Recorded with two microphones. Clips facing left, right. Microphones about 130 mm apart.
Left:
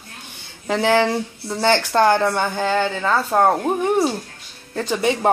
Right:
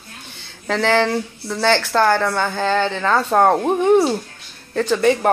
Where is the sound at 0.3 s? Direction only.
15° left (ahead or behind).